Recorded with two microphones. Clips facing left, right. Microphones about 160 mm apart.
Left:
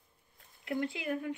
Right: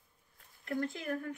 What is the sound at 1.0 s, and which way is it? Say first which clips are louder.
Speech: left 2 dB; 15° left (ahead or behind).